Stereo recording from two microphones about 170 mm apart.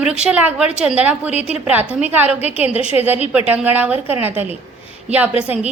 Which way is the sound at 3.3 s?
10° right (ahead or behind).